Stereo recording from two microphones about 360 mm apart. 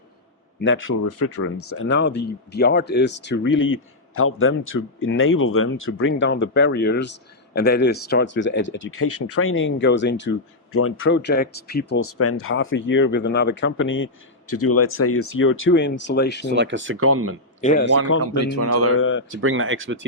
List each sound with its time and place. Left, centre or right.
0.6 s speech: left
12.1 s speech: left
16.5 s speech: right
17.6 s speech: left
18.2 s speech: right
18.9 s speech: left
19.3 s speech: right